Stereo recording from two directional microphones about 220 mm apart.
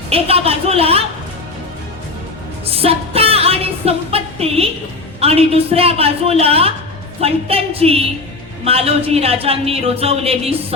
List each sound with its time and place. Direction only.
0.1 s speech: 25° right (ahead or behind)
2.6 s music: 25° right (ahead or behind)
5.2 s speech: 25° right (ahead or behind)